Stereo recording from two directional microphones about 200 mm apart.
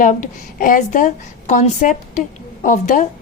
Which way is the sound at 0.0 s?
40° left (ahead or behind).